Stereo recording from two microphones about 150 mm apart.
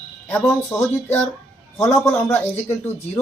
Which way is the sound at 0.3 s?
15° left (ahead or behind).